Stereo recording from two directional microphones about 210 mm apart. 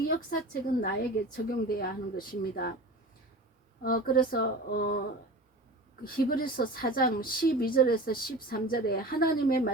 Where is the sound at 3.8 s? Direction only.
45° left (ahead or behind).